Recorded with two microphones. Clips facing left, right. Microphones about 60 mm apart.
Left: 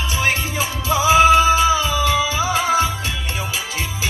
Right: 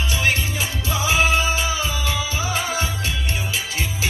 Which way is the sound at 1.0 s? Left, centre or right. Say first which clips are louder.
Left 7 dB; left.